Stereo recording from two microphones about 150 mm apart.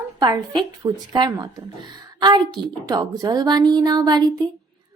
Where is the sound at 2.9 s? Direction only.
25° right (ahead or behind).